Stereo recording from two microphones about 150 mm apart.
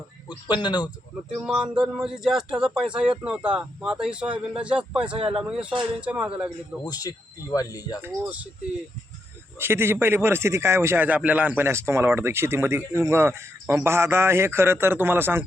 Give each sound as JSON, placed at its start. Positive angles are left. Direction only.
{"t": 0.3, "sound": "speech", "side_deg": 30}
{"t": 1.4, "sound": "a man's voice", "side_deg": 0}
{"t": 6.8, "sound": "speech", "side_deg": 25}
{"t": 8.0, "sound": "a man's voice", "side_deg": -10}
{"t": 9.6, "sound": "a man's voice", "side_deg": -15}